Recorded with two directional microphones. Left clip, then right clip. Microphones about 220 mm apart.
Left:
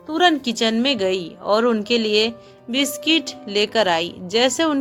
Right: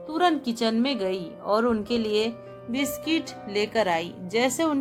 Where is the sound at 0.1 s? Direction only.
15° left (ahead or behind).